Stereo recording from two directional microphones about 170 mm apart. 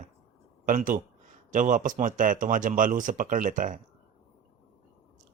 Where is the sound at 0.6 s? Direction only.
50° right (ahead or behind).